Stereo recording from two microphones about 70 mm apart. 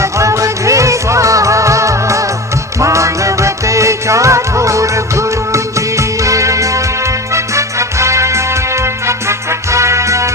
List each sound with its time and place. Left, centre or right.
0.0 s music: right